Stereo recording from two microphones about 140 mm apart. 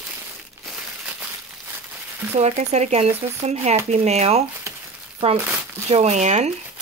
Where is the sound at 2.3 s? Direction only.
55° right (ahead or behind).